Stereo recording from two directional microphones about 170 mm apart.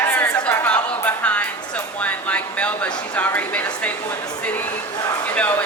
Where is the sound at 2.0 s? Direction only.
10° left (ahead or behind).